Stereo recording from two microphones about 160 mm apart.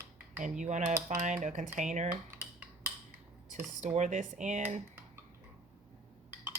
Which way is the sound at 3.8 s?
45° right (ahead or behind).